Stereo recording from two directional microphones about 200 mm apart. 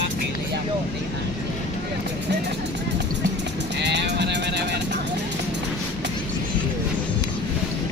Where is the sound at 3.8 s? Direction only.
60° right (ahead or behind).